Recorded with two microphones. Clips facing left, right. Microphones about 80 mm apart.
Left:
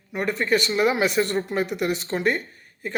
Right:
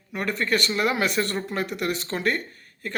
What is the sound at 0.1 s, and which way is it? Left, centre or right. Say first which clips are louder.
Speech: left 3 dB; left.